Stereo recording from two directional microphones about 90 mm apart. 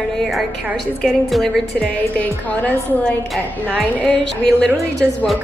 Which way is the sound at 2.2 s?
20° left (ahead or behind).